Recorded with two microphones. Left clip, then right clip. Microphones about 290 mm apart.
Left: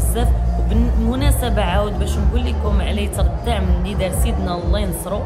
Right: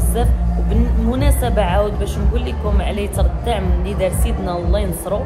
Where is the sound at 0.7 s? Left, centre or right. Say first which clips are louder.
Right 1 dB; centre.